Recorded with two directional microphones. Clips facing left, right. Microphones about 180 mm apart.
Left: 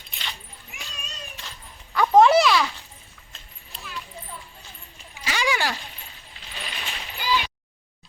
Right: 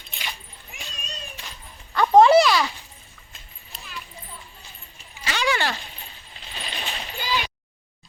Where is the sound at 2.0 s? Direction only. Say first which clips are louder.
Right 2 dB; centre (ahead or behind).